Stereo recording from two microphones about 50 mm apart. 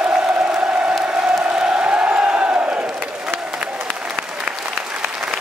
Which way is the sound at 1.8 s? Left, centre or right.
Right.